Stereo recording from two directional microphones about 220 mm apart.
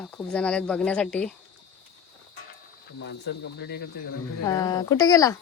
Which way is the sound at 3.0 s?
50° left (ahead or behind).